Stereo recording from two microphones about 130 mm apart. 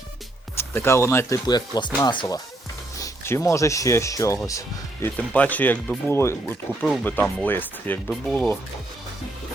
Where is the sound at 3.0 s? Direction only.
25° left (ahead or behind).